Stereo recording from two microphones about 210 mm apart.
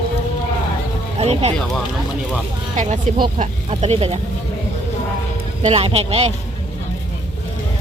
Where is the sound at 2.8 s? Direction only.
35° right (ahead or behind).